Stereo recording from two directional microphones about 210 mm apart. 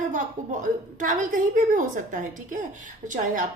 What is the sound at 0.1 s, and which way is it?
A woman's voice, 35° right (ahead or behind).